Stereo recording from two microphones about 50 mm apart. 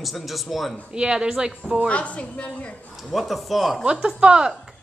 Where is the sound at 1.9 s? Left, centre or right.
Left.